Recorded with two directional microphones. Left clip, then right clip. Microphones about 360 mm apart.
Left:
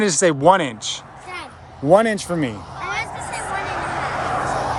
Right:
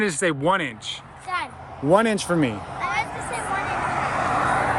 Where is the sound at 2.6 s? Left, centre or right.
Right.